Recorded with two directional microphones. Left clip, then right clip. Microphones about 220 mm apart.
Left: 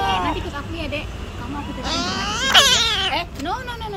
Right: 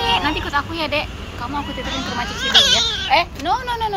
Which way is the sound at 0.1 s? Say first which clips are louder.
Right 4 dB; 5° right (ahead or behind).